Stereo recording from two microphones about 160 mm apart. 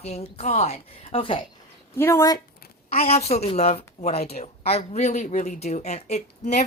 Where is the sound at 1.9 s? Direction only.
15° left (ahead or behind).